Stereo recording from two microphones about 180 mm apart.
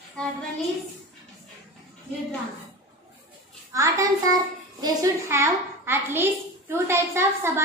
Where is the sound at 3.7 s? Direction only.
20° right (ahead or behind).